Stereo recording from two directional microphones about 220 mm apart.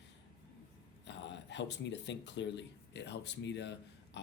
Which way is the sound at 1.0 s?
55° left (ahead or behind).